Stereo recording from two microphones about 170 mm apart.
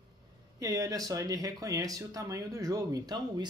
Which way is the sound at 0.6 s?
20° right (ahead or behind).